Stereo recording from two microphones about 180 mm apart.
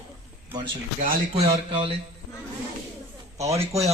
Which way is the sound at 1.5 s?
30° right (ahead or behind).